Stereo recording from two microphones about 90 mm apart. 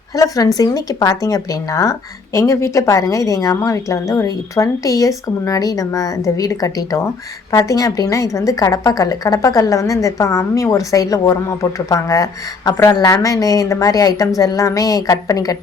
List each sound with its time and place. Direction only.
0.2 s speech: 40° left (ahead or behind)